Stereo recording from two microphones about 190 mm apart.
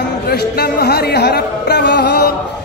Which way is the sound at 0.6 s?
55° left (ahead or behind).